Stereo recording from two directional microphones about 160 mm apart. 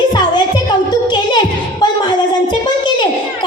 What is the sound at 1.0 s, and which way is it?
Music, 30° left (ahead or behind).